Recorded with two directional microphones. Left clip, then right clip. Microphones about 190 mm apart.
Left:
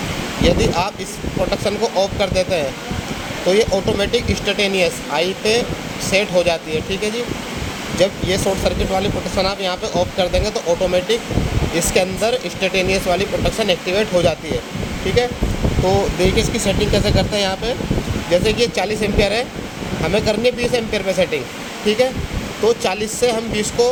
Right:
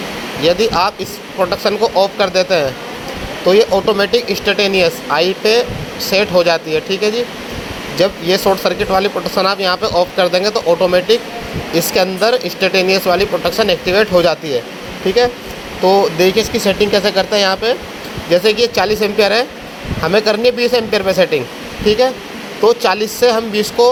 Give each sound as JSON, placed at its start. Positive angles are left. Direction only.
{"t": 0.4, "sound": "speech", "side_deg": -15}
{"t": 16.1, "sound": "speech", "side_deg": -15}